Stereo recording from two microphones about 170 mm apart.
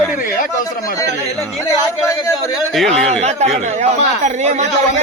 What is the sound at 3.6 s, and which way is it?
A man's voice, 40° right (ahead or behind).